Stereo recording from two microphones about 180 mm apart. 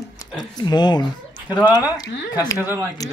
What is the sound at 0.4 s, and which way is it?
Speech, 25° left (ahead or behind).